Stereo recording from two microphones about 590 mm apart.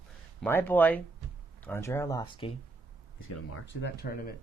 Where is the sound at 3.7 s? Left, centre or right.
Centre.